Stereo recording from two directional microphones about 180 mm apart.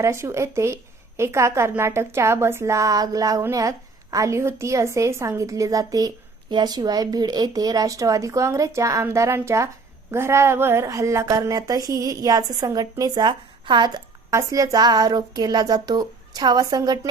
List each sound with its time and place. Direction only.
0.0 s a woman's voice: 15° right (ahead or behind)